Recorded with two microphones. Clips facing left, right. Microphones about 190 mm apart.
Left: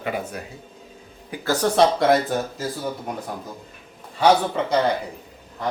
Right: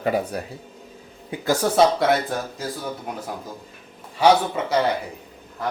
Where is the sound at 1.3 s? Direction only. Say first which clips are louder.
Right 1 dB; 15° right (ahead or behind).